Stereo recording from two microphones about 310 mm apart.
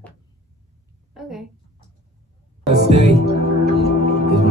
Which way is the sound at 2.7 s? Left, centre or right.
Right.